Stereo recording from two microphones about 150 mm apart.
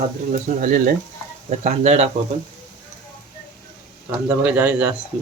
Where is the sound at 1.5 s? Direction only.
50° right (ahead or behind).